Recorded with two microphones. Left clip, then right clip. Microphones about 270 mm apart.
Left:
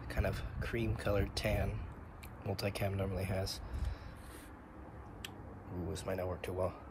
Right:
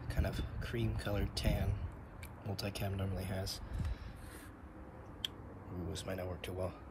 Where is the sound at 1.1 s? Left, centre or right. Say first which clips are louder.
Left 6 dB; centre.